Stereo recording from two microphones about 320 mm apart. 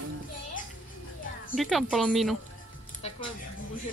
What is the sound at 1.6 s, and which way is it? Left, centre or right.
Speech, centre.